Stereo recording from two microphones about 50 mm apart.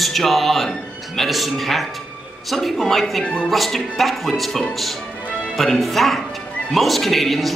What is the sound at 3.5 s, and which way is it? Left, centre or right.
Speech, centre.